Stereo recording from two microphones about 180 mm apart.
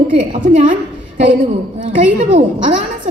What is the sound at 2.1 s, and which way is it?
Speech, 35° right (ahead or behind).